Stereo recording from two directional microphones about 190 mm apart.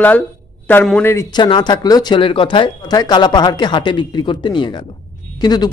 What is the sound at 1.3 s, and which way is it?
Speech, 25° left (ahead or behind).